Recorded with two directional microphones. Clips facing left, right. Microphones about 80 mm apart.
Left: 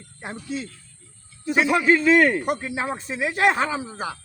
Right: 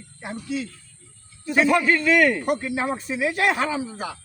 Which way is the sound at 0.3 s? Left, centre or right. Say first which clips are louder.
Right 3 dB; left.